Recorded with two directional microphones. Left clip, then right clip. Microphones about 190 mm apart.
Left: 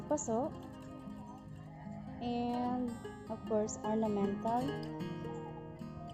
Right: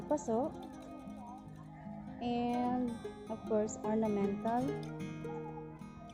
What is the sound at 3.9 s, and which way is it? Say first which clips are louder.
Speech: even; 5° left (ahead or behind).